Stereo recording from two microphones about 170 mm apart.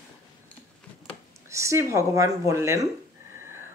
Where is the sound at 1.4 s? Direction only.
15° right (ahead or behind).